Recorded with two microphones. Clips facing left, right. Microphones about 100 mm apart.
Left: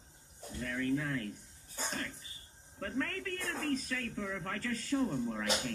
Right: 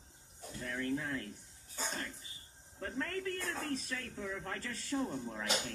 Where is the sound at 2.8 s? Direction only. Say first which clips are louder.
Left 1 dB; 25° right (ahead or behind).